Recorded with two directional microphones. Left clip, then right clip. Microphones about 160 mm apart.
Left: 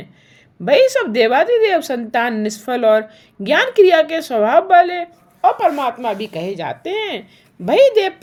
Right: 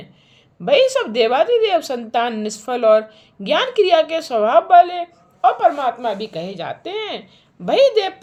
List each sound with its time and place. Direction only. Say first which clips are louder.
0.7 s a woman's voice: left 2 dB; 30° left (ahead or behind)